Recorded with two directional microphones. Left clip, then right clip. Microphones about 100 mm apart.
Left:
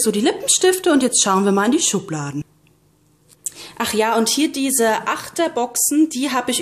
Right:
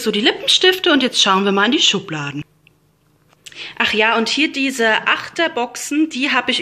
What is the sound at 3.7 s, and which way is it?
A woman's voice, 35° left (ahead or behind).